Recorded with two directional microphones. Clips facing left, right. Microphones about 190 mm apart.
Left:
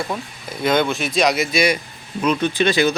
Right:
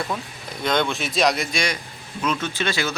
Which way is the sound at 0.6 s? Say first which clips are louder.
Left 4 dB; 5° left (ahead or behind).